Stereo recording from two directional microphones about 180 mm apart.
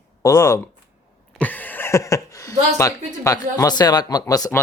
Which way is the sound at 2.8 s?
15° left (ahead or behind).